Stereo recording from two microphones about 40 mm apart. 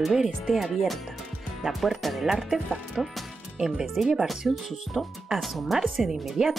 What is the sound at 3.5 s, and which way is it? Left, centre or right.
Speech, centre.